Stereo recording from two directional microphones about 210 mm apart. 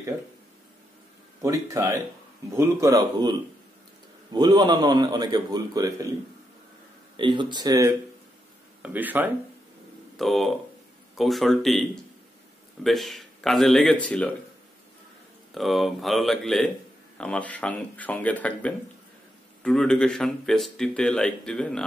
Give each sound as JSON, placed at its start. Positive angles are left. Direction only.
{"t": 1.4, "sound": "a man's voice", "side_deg": -15}
{"t": 7.2, "sound": "a man's voice", "side_deg": -25}
{"t": 15.5, "sound": "speech", "side_deg": 0}